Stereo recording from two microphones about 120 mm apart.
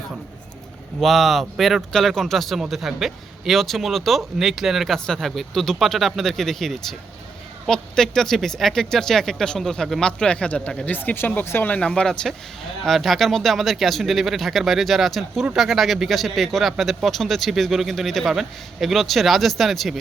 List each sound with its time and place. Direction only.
1.0 s speech: centre (ahead or behind)